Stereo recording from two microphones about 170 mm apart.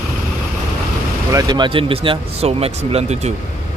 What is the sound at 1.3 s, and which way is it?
Speech, 20° right (ahead or behind).